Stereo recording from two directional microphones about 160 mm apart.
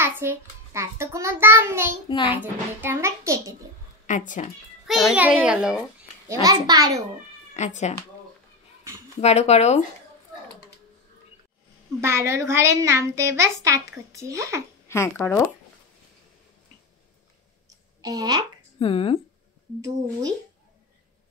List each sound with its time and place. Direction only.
0.0 s a child's voice: 15° right (ahead or behind)
2.0 s speech: 30° left (ahead or behind)
2.4 s a child's voice: 15° right (ahead or behind)
4.0 s speech: 50° left (ahead or behind)
4.8 s a child's voice: centre (ahead or behind)
6.2 s a child's voice: 20° right (ahead or behind)
7.5 s speech: 45° left (ahead or behind)
9.2 s speech: 45° left (ahead or behind)
12.0 s a child's voice: 15° right (ahead or behind)
14.9 s speech: 15° left (ahead or behind)
18.0 s a child's voice: 25° right (ahead or behind)
18.8 s speech: 35° left (ahead or behind)
19.8 s a child's voice: 20° right (ahead or behind)